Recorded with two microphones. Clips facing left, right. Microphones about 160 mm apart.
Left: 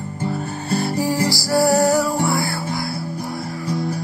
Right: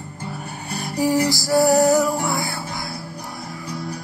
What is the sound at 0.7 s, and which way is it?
Music, 15° right (ahead or behind).